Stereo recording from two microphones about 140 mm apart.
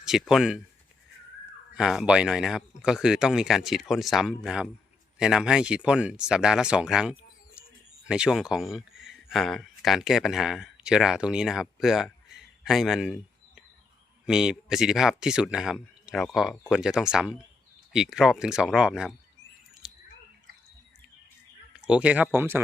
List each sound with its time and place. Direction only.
0.0 s speech: 5° right (ahead or behind)
1.7 s speech: 5° right (ahead or behind)
14.3 s speech: 5° right (ahead or behind)
19.8 s a sound: 5° right (ahead or behind)
21.8 s speech: 10° right (ahead or behind)